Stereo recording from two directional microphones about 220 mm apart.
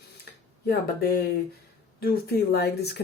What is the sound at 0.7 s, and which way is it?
Speech, 45° left (ahead or behind).